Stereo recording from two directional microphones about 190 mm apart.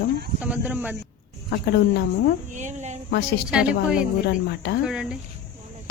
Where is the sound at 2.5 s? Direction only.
40° right (ahead or behind).